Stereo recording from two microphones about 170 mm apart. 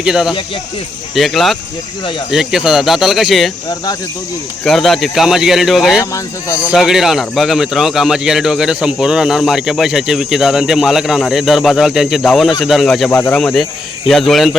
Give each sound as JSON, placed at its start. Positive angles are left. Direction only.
{"t": 0.0, "sound": "speech", "side_deg": -5}
{"t": 4.6, "sound": "speech", "side_deg": 0}
{"t": 6.0, "sound": "speech", "side_deg": 15}
{"t": 6.6, "sound": "speech", "side_deg": -5}
{"t": 13.1, "sound": "speech", "side_deg": 10}